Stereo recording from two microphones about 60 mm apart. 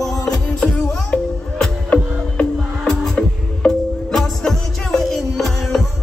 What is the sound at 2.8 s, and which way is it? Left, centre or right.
Music, centre.